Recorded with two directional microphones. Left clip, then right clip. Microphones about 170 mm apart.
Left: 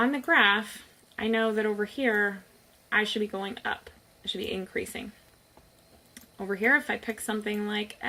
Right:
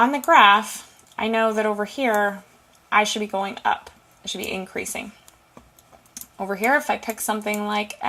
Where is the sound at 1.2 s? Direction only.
35° right (ahead or behind).